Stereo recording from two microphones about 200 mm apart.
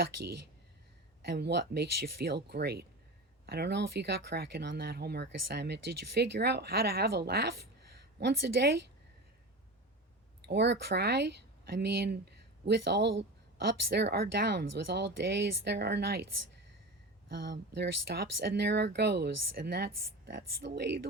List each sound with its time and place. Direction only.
1.2 s speech: 60° right (ahead or behind)
10.4 s speech: 60° right (ahead or behind)
17.2 s speech: 60° right (ahead or behind)